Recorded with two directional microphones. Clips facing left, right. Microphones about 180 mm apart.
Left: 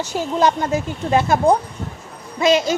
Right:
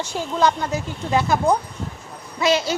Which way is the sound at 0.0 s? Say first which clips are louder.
Left 3 dB; 40° left (ahead or behind).